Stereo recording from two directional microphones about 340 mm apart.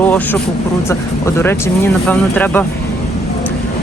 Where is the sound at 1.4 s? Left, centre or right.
Centre.